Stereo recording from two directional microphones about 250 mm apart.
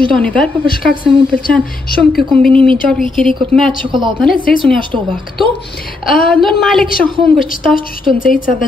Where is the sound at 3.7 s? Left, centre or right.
Centre.